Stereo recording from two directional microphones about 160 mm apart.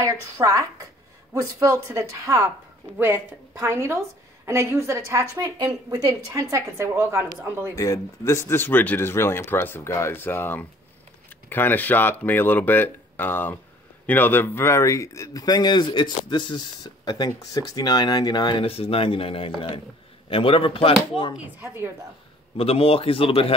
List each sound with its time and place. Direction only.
0.0 s a woman's voice: 20° right (ahead or behind)
7.7 s a man's voice: 20° left (ahead or behind)
21.5 s a woman's voice: 15° right (ahead or behind)
22.6 s a man's voice: 35° left (ahead or behind)